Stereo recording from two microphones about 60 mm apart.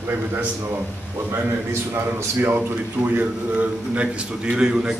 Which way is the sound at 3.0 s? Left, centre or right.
Right.